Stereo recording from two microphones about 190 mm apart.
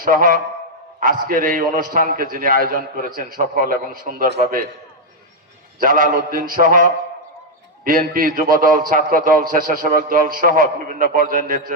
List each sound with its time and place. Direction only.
0.0 s a man's voice: 45° right (ahead or behind)
5.8 s a man's voice: 45° right (ahead or behind)